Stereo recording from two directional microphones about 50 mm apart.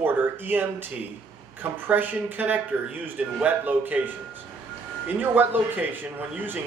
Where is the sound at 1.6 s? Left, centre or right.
Right.